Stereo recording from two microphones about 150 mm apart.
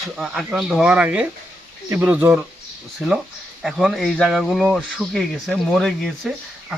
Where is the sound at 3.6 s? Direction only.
Centre (ahead or behind).